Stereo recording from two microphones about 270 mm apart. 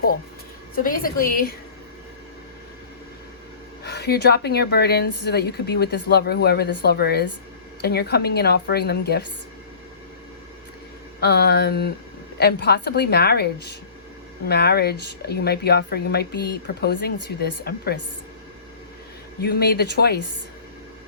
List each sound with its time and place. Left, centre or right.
0.8 s speech: left
3.8 s speech: left
11.2 s speech: left
19.4 s speech: left